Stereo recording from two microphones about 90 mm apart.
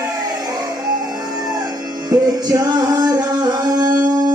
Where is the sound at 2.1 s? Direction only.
45° right (ahead or behind).